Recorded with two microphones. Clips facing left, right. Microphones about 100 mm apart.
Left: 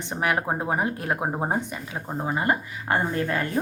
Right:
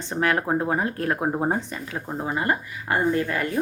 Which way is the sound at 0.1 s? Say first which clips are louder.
Right 3 dB; 15° left (ahead or behind).